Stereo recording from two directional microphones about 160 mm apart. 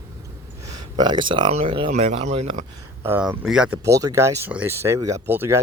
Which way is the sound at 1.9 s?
45° right (ahead or behind).